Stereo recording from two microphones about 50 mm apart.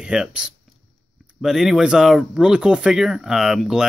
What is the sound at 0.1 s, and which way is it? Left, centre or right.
Speech, centre.